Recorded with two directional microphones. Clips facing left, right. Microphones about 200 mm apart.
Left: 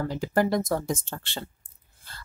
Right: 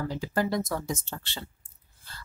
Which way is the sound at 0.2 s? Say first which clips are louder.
Left 5 dB; 50° left (ahead or behind).